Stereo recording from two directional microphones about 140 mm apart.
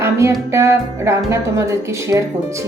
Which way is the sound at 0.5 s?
20° right (ahead or behind).